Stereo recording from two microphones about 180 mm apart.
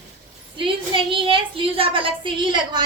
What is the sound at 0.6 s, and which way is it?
A woman's voice, 30° right (ahead or behind).